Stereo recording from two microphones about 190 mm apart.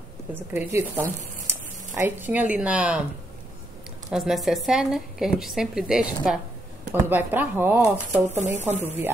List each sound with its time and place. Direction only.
0.3 s speech: 10° right (ahead or behind)
4.1 s a woman's voice: centre (ahead or behind)
8.4 s speech: 35° right (ahead or behind)
8.8 s speech: 10° right (ahead or behind)